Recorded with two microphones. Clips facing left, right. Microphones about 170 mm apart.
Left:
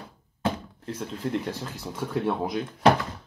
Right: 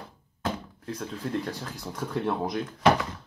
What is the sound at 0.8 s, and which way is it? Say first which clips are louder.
Speech: left 2 dB; 10° left (ahead or behind).